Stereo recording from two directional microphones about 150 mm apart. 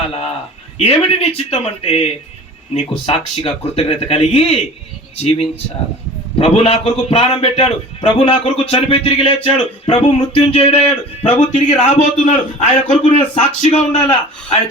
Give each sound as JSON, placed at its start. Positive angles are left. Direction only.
{"t": 0.8, "sound": "a man's voice", "side_deg": 40}
{"t": 3.1, "sound": "a man's voice", "side_deg": 45}